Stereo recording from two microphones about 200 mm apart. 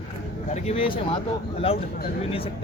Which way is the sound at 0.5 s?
30° left (ahead or behind).